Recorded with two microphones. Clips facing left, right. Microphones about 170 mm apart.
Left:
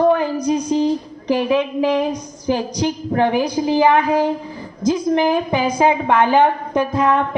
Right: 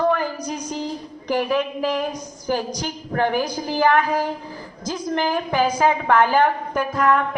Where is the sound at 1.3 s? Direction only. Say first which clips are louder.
Left 4 dB; 20° left (ahead or behind).